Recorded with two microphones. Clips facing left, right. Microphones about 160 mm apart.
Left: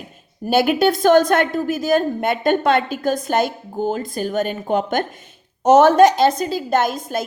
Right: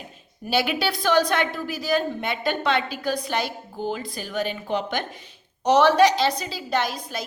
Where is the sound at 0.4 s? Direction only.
45° left (ahead or behind).